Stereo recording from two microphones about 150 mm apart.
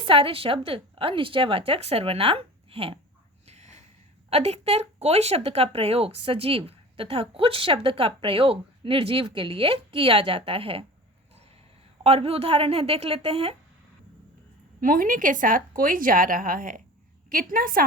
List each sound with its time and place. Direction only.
0.0 s speech: 40° right (ahead or behind)
3.4 s snort: 50° right (ahead or behind)
4.3 s speech: 45° right (ahead or behind)
12.0 s speech: 40° right (ahead or behind)
14.8 s a woman's voice: 65° right (ahead or behind)